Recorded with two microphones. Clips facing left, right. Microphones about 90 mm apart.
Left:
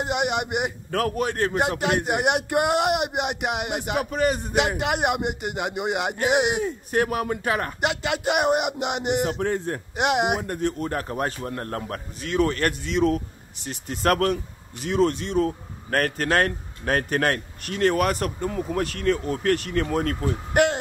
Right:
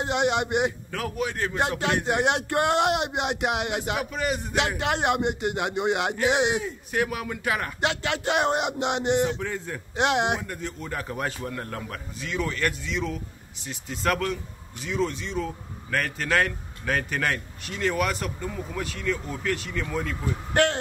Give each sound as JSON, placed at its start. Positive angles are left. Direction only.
{"t": 0.0, "sound": "speech", "side_deg": 5}
{"t": 0.9, "sound": "a man's voice", "side_deg": 50}
{"t": 1.7, "sound": "speech", "side_deg": 15}
{"t": 3.9, "sound": "a man's voice", "side_deg": 50}
{"t": 4.6, "sound": "speech", "side_deg": 10}
{"t": 6.6, "sound": "a man's voice", "side_deg": 45}
{"t": 7.8, "sound": "speech", "side_deg": 15}
{"t": 9.2, "sound": "a man's voice", "side_deg": 50}
{"t": 9.9, "sound": "speech", "side_deg": 10}
{"t": 10.4, "sound": "a man's voice", "side_deg": 50}